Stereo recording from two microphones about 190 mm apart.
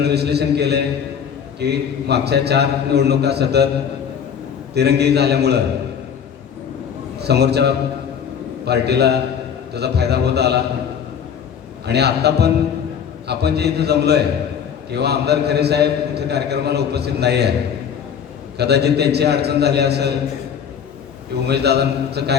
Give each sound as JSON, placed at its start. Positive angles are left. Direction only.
{"t": 0.0, "sound": "a man's voice", "side_deg": -60}
{"t": 4.7, "sound": "a man's voice", "side_deg": -60}
{"t": 7.2, "sound": "a man's voice", "side_deg": -60}
{"t": 11.9, "sound": "a man's voice", "side_deg": -60}
{"t": 18.5, "sound": "a man's voice", "side_deg": -60}
{"t": 21.4, "sound": "a man's voice", "side_deg": -60}